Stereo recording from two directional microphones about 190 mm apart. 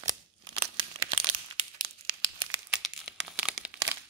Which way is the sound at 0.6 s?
30° right (ahead or behind).